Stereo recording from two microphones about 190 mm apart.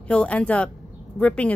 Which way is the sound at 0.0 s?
5° left (ahead or behind).